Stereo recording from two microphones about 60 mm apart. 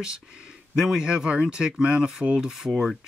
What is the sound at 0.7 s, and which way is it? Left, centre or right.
Speech, centre.